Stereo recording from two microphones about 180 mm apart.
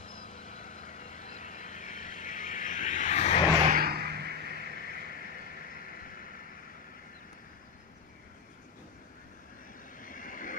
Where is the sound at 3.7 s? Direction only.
60° right (ahead or behind).